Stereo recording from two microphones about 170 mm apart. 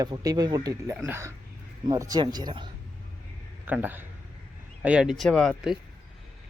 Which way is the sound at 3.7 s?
10° right (ahead or behind).